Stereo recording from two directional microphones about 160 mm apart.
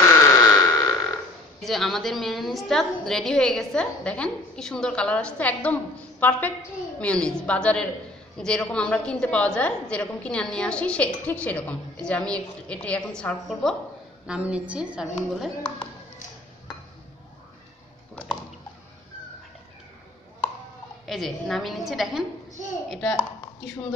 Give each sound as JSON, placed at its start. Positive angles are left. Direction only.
{"t": 0.0, "sound": "a sound", "side_deg": 20}
{"t": 1.6, "sound": "a woman's voice", "side_deg": 0}
{"t": 21.0, "sound": "a woman's voice", "side_deg": 0}